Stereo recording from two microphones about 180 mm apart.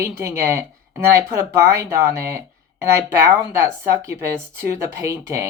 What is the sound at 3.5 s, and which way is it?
Speech, 15° right (ahead or behind).